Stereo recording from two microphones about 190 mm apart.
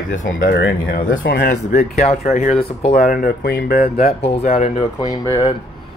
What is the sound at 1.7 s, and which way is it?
Speech, 40° left (ahead or behind).